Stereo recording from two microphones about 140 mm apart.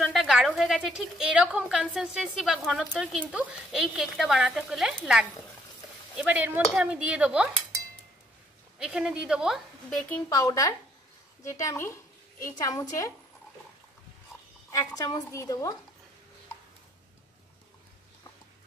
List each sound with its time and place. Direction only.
0.0 s a woman's voice: 5° right (ahead or behind)
8.7 s a woman's voice: 5° right (ahead or behind)
9.8 s speech: 10° left (ahead or behind)
10.3 s a woman's voice: 25° left (ahead or behind)
14.7 s a woman's voice: 25° left (ahead or behind)